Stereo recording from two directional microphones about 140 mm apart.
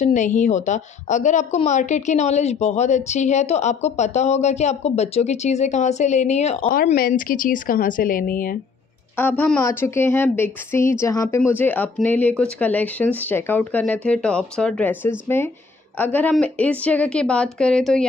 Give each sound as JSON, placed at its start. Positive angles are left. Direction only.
{"t": 0.0, "sound": "a woman's voice", "side_deg": 60}
{"t": 7.0, "sound": "a woman's voice", "side_deg": 85}
{"t": 9.2, "sound": "speech", "side_deg": 10}
{"t": 9.6, "sound": "speech", "side_deg": 20}